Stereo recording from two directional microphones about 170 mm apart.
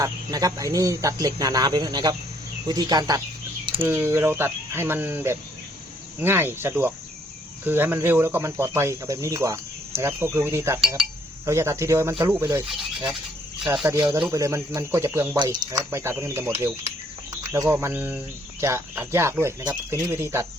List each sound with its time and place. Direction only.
0.0 s speech: 20° right (ahead or behind)